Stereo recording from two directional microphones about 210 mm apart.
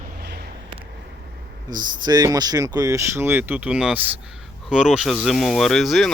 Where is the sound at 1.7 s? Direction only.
40° right (ahead or behind).